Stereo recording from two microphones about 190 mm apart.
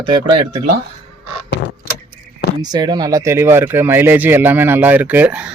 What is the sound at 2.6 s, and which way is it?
Speech, 20° right (ahead or behind).